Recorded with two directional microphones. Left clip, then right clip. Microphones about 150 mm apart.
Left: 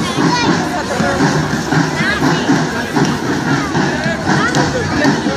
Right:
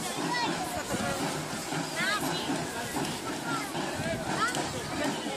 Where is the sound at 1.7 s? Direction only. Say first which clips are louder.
Left 14 dB; 45° right (ahead or behind).